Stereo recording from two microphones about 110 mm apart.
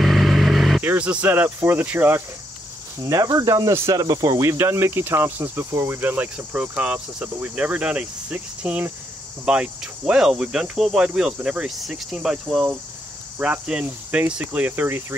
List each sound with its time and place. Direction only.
0.0 s vehicle: centre (ahead or behind)
0.8 s cricket: 10° right (ahead or behind)
3.0 s speech: 30° right (ahead or behind); by 8.9 s 15° right (ahead or behind)
9.5 s cricket: 10° right (ahead or behind)